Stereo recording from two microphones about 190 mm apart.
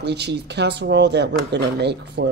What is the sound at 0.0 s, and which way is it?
Speech, 60° right (ahead or behind).